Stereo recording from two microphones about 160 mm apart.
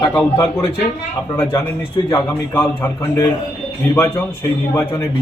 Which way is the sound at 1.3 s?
15° left (ahead or behind).